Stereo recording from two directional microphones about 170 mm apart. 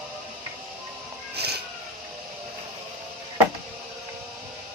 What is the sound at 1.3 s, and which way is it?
Vehicle, 70° right (ahead or behind).